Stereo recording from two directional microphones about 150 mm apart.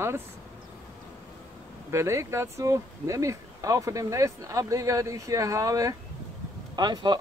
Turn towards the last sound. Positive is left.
turn(degrees=-30)  # may be behind; listen again after turning